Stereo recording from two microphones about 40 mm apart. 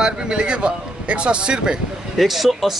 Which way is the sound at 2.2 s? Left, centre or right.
Centre.